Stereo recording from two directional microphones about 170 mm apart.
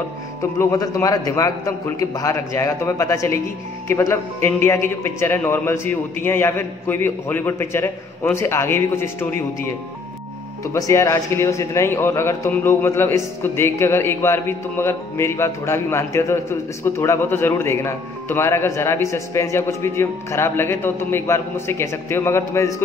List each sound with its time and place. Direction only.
0.4 s speech: 15° left (ahead or behind)